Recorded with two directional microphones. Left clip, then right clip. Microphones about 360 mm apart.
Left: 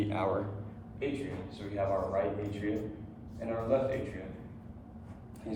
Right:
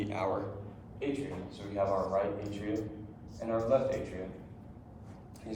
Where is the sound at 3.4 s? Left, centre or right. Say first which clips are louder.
Right 3 dB; centre.